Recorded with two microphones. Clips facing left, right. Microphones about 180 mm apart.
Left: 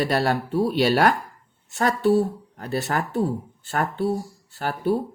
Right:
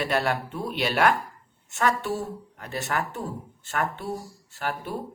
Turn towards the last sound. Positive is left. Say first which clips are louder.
# left 8 dB
turn(degrees=35)  # may be behind; listen again after turning